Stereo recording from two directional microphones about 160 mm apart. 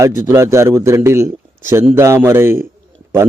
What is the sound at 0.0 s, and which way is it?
A man's voice, 20° right (ahead or behind).